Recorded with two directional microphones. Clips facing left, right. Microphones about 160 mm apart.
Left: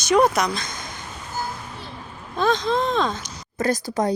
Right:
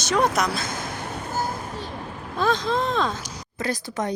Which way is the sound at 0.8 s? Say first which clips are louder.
Right 5 dB; 60° right (ahead or behind).